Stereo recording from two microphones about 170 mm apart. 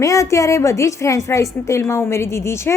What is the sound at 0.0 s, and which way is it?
A woman's voice, 20° left (ahead or behind).